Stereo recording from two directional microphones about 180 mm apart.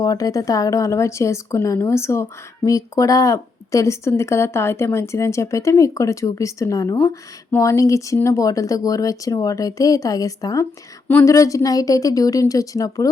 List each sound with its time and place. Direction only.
0.0 s a woman's voice: 20° left (ahead or behind)